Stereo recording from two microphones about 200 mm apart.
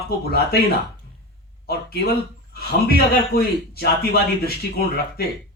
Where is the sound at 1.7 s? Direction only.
50° left (ahead or behind).